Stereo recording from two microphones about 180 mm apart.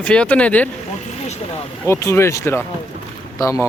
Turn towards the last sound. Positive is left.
turn(degrees=15)  # may be behind; listen again after turning